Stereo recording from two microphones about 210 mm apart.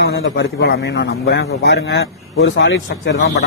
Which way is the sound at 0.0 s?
55° left (ahead or behind).